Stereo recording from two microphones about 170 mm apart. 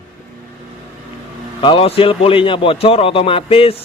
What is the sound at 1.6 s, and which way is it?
A man's voice, 30° left (ahead or behind).